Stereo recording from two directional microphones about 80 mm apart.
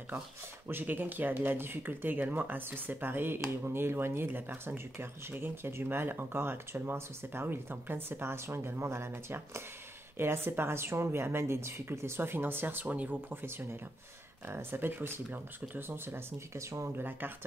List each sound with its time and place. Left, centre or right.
0.7 s speech: right